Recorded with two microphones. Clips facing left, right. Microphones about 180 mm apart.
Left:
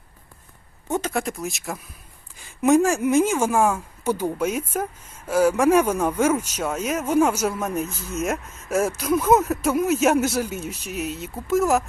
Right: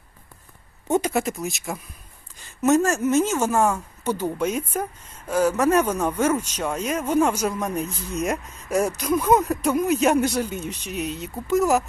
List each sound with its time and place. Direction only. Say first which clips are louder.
0.9 s speech: right 4 dB; 20° right (ahead or behind)
1.1 s speech: right 2 dB; centre (ahead or behind)
2.4 s speech: left 2 dB; 10° left (ahead or behind)